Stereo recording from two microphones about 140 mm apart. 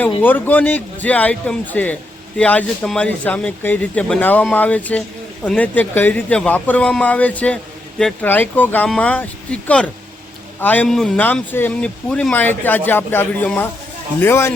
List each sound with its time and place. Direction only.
0.2 s speech: 15° left (ahead or behind)